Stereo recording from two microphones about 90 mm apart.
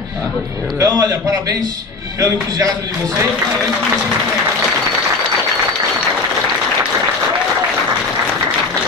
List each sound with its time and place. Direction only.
0.7 s a man's voice: 30° right (ahead or behind)
2.1 s a man's voice: 35° right (ahead or behind)